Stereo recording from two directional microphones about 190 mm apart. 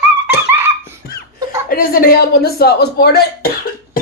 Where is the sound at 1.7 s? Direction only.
50° left (ahead or behind).